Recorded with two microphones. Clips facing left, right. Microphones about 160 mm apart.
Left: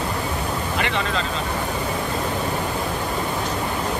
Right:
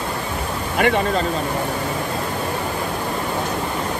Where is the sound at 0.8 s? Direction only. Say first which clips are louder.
Right 9 dB; 50° right (ahead or behind).